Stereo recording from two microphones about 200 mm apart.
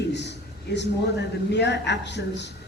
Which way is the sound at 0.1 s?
60° left (ahead or behind).